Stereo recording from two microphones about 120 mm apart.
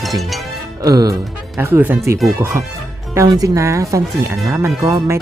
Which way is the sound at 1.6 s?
15° right (ahead or behind).